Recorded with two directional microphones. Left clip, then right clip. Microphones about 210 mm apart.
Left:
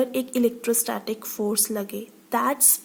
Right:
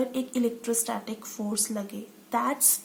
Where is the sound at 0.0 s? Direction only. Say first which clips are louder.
Left 5 dB; 35° left (ahead or behind).